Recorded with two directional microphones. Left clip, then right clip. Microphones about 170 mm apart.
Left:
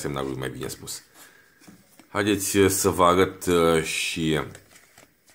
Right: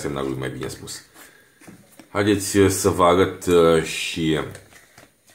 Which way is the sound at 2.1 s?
40° left (ahead or behind).